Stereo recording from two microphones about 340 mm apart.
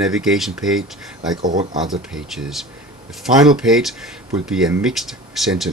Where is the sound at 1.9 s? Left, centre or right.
Centre.